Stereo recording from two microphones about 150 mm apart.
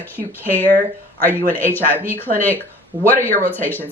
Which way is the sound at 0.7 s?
65° right (ahead or behind).